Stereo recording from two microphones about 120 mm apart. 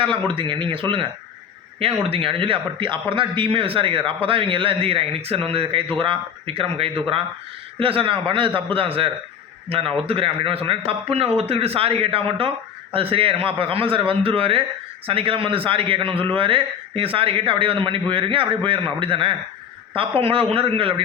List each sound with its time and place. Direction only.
0.3 s a man's voice: 45° right (ahead or behind)